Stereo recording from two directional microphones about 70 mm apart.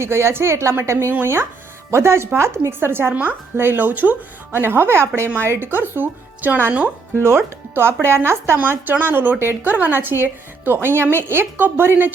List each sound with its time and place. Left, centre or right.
0.0 s speech: right
7.2 s speech: right
8.5 s speech: right